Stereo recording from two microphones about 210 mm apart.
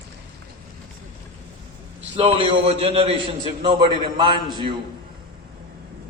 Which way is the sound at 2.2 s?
25° right (ahead or behind).